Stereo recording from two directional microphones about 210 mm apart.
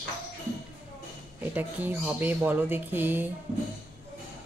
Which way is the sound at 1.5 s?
10° right (ahead or behind).